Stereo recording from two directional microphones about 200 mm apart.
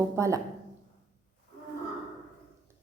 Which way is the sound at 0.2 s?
15° right (ahead or behind).